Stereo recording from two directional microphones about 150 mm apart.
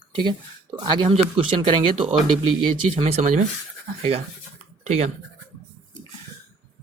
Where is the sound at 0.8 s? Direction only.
30° right (ahead or behind).